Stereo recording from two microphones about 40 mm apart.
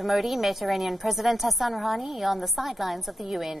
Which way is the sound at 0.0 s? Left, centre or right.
Centre.